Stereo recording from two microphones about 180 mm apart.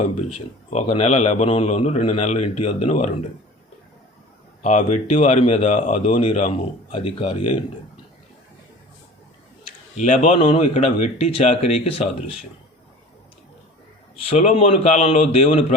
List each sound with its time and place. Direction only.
0.7 s speech: 35° left (ahead or behind)
4.6 s speech: 40° left (ahead or behind)
10.4 s speech: 30° left (ahead or behind)
14.2 s speech: 35° left (ahead or behind)